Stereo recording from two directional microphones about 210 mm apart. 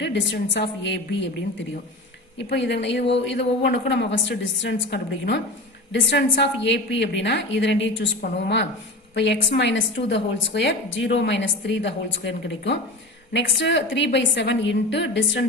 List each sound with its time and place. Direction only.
0.0 s a woman's voice: 55° left (ahead or behind)
2.5 s a woman's voice: 55° left (ahead or behind)